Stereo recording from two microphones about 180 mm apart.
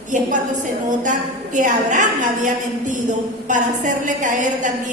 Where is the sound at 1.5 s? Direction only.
45° right (ahead or behind).